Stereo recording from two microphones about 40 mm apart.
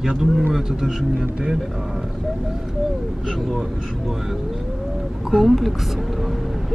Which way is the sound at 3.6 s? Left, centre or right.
Centre.